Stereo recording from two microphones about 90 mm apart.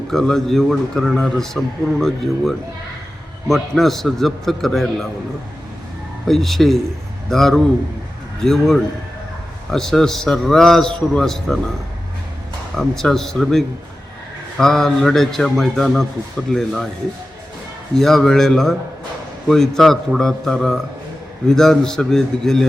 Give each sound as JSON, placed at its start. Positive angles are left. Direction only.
{"t": 0.1, "sound": "a man's voice", "side_deg": 5}
{"t": 6.2, "sound": "a man's voice", "side_deg": 5}
{"t": 12.7, "sound": "a man's voice", "side_deg": 5}
{"t": 17.9, "sound": "a man's voice", "side_deg": 5}